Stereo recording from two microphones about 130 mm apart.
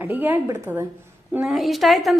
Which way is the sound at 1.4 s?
Centre (ahead or behind).